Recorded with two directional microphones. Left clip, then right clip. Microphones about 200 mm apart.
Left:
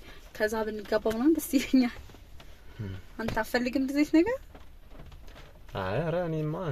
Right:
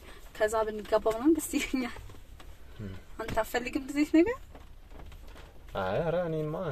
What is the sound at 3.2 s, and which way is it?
Speech, 50° left (ahead or behind).